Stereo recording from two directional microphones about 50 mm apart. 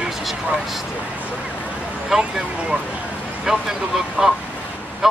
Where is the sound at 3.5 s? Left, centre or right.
Centre.